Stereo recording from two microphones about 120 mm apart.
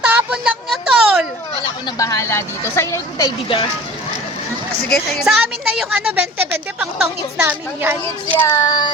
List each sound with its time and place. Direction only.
0.0 s a sound: 10° right (ahead or behind)
2.0 s a woman's voice: 25° left (ahead or behind)
4.9 s speech: 10° left (ahead or behind)
5.2 s speech: 5° right (ahead or behind)
6.4 s a woman's voice: 15° right (ahead or behind)
8.4 s child singing: 25° left (ahead or behind)